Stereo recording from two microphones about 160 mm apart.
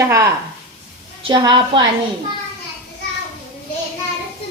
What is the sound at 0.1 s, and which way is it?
A woman's voice, 20° right (ahead or behind).